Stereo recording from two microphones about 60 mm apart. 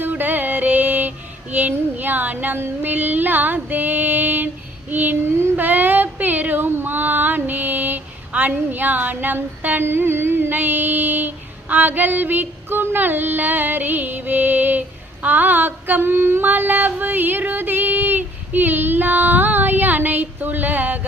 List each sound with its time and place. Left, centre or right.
0.0 s music: right
2.6 s female singing: right
4.9 s child singing: right
5.5 s a sound: right